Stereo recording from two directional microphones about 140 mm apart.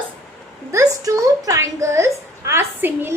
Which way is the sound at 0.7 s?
25° right (ahead or behind).